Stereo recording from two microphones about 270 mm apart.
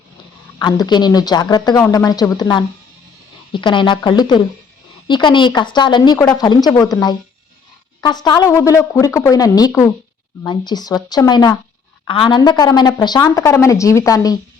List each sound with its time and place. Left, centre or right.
0.6 s a woman's voice: centre